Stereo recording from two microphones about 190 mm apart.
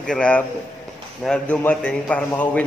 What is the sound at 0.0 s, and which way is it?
A man's voice, 5° left (ahead or behind).